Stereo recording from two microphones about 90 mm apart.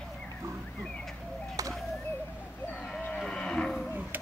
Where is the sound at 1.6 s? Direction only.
40° right (ahead or behind).